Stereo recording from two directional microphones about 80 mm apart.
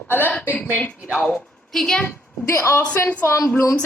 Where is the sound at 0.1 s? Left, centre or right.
Left.